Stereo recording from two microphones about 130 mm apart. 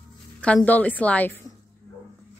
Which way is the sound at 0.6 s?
10° left (ahead or behind).